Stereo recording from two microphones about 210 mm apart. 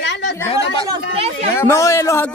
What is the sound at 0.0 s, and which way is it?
Chatter, 55° left (ahead or behind).